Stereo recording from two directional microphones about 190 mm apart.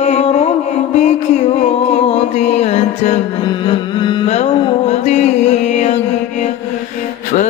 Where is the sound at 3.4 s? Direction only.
25° left (ahead or behind).